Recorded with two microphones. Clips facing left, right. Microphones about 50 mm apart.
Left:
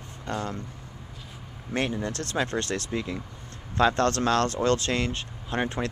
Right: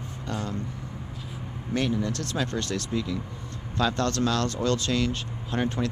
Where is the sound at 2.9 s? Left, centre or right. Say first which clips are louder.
Right 2 dB; left.